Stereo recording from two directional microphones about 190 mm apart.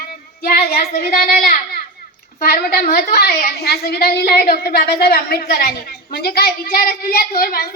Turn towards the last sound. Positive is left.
turn(degrees=55)  # may be behind; listen again after turning